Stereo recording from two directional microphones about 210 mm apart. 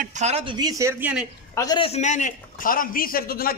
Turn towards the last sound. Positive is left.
turn(degrees=45)  # may be behind; listen again after turning